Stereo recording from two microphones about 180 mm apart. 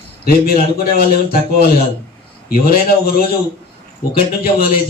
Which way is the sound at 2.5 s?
55° left (ahead or behind).